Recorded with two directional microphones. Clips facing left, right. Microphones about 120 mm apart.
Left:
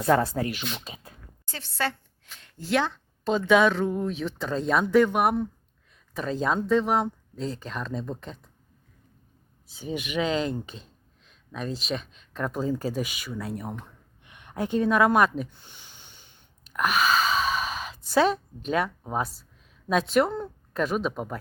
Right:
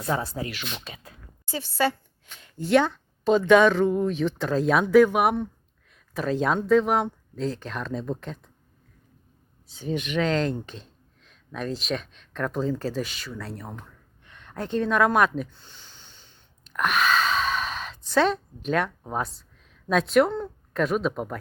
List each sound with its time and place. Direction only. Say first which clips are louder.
0.0 s speech: left 6 dB; 60° left (ahead or behind)
0.9 s a sound: even; 40° left (ahead or behind)
1.5 s speech: right 5 dB; 5° right (ahead or behind)
9.6 s a woman's voice: right 3 dB; 5° left (ahead or behind)
15.6 s a sound: even; 15° left (ahead or behind)
16.7 s gasp: even; 5° left (ahead or behind)
19.9 s a woman's voice: right 2 dB; centre (ahead or behind)